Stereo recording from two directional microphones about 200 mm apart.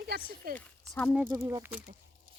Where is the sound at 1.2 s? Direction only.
20° right (ahead or behind).